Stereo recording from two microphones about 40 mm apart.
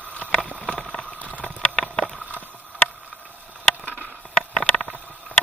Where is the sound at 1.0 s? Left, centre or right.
Left.